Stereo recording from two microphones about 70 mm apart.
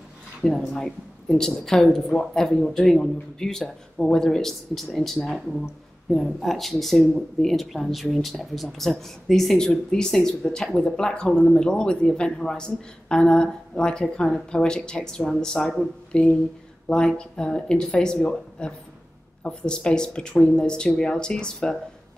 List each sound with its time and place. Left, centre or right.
0.4 s a woman's voice: centre